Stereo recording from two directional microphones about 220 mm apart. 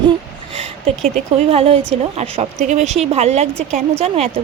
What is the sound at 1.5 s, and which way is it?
Speech, 25° right (ahead or behind).